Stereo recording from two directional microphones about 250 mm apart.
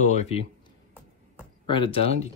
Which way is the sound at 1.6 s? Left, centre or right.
Left.